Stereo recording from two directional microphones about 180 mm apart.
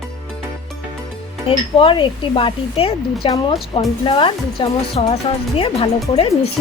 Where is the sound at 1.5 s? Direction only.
30° left (ahead or behind).